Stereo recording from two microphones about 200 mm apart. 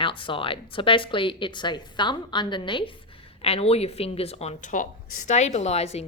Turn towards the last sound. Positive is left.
turn(degrees=30)  # may be behind; listen again after turning